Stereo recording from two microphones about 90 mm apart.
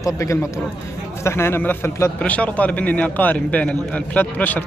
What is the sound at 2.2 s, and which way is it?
A man's voice, 15° left (ahead or behind).